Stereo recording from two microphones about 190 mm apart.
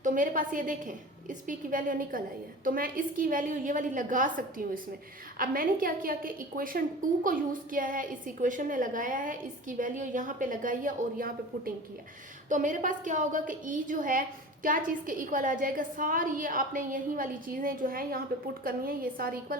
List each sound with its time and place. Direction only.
0.0 s a woman's voice: 45° right (ahead or behind)